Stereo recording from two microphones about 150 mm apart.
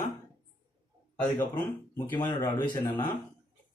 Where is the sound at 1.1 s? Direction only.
10° left (ahead or behind).